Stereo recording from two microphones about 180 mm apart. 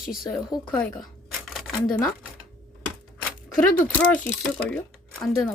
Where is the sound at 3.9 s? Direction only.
5° left (ahead or behind).